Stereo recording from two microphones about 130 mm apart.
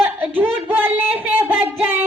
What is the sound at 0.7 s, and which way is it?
Music, 15° right (ahead or behind).